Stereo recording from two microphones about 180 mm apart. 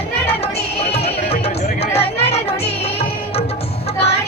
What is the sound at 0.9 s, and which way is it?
Music, 35° left (ahead or behind).